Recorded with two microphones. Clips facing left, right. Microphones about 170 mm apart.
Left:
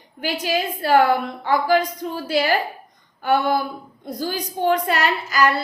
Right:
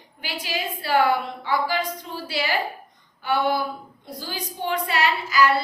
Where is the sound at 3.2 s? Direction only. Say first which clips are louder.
Left 4 dB; 45° left (ahead or behind).